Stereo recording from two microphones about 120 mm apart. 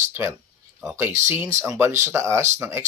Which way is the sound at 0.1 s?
25° right (ahead or behind).